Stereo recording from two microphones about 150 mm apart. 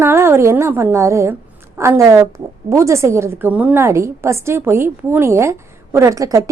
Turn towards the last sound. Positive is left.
turn(degrees=-20)  # may be behind; listen again after turning